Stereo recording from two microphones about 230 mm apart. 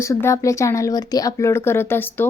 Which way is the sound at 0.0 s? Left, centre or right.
Centre.